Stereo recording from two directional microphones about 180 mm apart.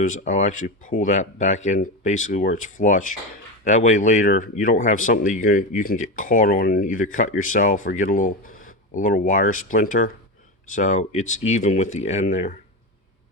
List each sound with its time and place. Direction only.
0.3 s speech: 45° left (ahead or behind)